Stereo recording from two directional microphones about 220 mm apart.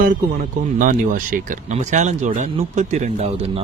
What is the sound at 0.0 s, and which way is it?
Speech, 40° right (ahead or behind).